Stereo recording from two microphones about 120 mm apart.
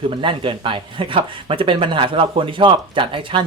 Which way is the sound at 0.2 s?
45° right (ahead or behind).